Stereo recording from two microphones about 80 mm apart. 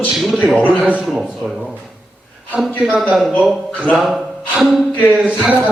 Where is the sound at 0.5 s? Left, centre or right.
Centre.